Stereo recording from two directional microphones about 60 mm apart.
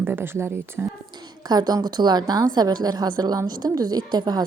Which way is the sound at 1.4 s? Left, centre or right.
Right.